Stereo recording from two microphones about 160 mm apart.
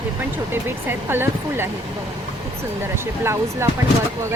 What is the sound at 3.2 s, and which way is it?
Speech, 15° right (ahead or behind).